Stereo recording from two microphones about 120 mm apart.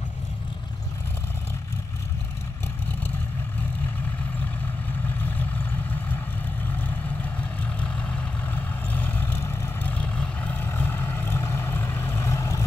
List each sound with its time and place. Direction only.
7.3 s vehicle: 10° left (ahead or behind)
9.9 s vehicle: 10° left (ahead or behind); by 12.6 s 25° left (ahead or behind)